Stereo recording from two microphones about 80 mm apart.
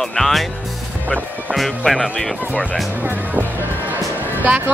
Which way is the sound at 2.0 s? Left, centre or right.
Centre.